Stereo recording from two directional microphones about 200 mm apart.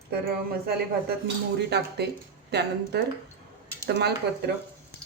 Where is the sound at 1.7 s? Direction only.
55° right (ahead or behind).